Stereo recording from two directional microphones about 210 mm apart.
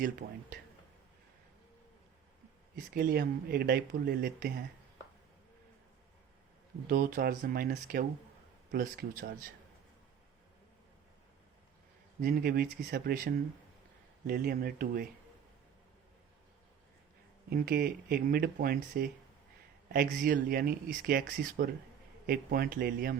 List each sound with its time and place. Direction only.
0.0 s speech: 40° right (ahead or behind)
2.9 s speech: 45° right (ahead or behind)
6.8 s speech: 40° right (ahead or behind)
12.2 s speech: 45° right (ahead or behind)
17.5 s speech: 45° right (ahead or behind)